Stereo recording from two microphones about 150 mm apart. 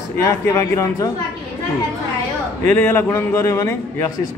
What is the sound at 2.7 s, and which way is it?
Speech, 15° left (ahead or behind).